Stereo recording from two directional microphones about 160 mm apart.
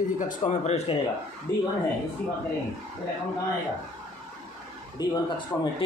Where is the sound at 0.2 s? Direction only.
50° left (ahead or behind).